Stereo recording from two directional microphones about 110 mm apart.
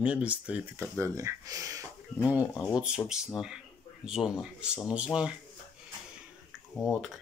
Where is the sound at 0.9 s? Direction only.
25° right (ahead or behind).